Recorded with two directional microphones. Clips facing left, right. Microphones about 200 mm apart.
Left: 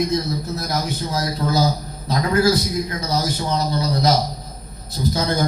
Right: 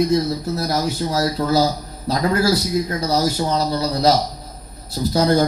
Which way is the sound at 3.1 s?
35° right (ahead or behind).